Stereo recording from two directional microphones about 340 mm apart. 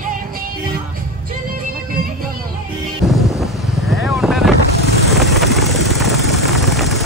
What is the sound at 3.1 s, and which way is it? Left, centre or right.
Music, centre.